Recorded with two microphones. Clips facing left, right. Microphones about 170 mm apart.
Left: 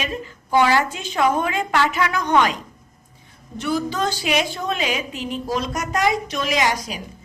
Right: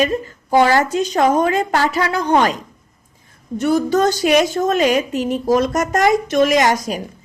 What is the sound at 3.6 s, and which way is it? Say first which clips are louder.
A woman's voice: right 7 dB; 45° right (ahead or behind).